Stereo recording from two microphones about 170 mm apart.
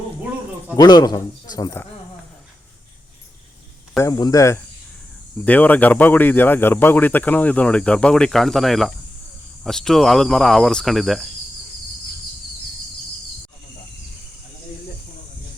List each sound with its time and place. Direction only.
0.8 s speech: 25° left (ahead or behind)
3.9 s speech: 20° left (ahead or behind); by 11.3 s centre (ahead or behind)